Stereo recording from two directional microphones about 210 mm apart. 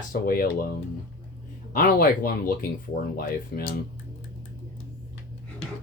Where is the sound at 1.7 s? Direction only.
40° left (ahead or behind).